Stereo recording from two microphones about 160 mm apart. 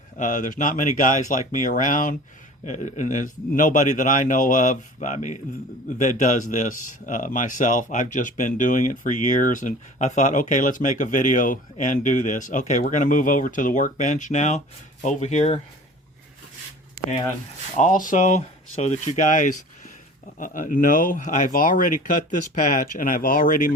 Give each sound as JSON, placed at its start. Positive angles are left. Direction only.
{"t": 0.2, "sound": "speech", "side_deg": 55}
{"t": 17.7, "sound": "speech", "side_deg": 55}